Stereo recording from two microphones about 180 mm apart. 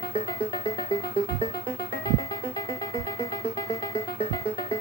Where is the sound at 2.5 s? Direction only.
20° left (ahead or behind).